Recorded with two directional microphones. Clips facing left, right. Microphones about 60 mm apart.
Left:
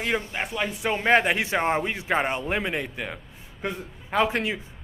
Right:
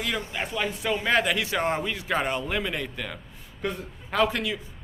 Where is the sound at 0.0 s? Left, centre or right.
Left.